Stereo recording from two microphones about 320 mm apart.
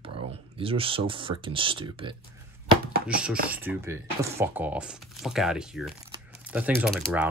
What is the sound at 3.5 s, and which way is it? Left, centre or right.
Speech, centre.